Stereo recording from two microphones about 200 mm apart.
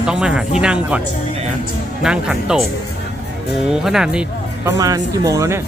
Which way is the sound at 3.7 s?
5° right (ahead or behind).